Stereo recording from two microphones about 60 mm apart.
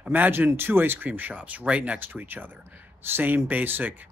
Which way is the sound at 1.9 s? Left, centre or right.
Right.